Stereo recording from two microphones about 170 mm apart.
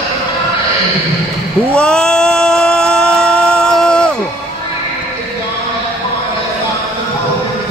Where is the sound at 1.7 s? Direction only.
5° left (ahead or behind).